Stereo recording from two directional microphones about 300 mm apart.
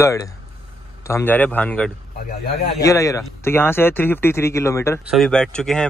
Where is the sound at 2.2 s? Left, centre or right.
Left.